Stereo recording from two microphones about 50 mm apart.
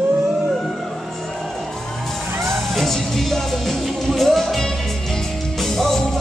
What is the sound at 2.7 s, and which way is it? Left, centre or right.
Music, centre.